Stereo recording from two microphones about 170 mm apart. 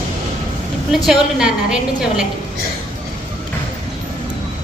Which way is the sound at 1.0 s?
5° right (ahead or behind).